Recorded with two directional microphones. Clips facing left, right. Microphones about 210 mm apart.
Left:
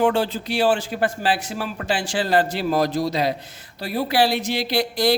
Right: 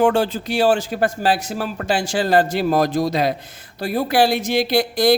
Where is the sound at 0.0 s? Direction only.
45° right (ahead or behind).